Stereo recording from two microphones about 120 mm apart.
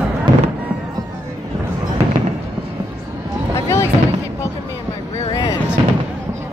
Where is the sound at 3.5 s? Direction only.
20° left (ahead or behind).